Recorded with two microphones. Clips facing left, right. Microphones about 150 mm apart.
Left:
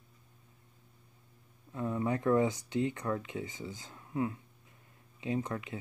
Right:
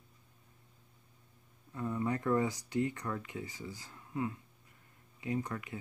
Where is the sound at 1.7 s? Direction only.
15° left (ahead or behind).